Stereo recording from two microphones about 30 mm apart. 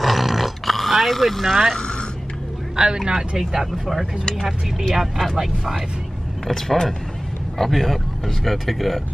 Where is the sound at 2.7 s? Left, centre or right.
Right.